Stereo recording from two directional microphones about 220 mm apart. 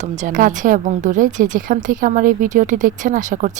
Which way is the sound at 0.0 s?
35° right (ahead or behind).